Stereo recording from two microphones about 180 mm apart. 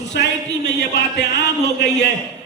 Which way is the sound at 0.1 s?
70° left (ahead or behind).